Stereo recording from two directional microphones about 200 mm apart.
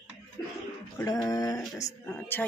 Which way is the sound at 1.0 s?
20° left (ahead or behind).